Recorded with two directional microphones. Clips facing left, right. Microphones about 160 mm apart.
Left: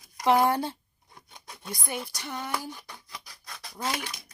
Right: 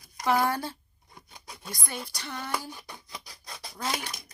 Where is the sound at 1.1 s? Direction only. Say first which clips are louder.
Right 1 dB; centre (ahead or behind).